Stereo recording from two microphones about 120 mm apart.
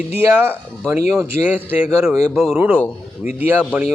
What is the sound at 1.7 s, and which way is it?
Speech, 10° right (ahead or behind).